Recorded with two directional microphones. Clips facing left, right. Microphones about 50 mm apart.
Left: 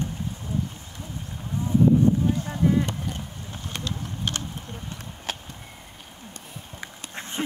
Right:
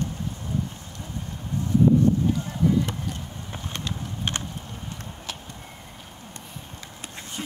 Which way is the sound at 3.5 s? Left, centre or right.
Right.